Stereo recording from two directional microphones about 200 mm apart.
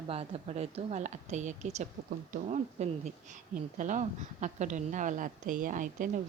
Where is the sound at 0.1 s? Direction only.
30° right (ahead or behind).